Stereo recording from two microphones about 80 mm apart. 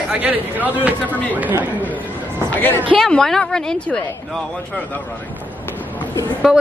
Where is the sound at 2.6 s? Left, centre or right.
Left.